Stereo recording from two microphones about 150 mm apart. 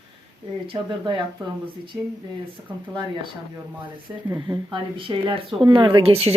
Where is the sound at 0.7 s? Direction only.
35° right (ahead or behind).